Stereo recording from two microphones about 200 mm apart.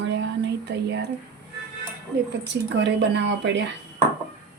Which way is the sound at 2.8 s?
60° right (ahead or behind).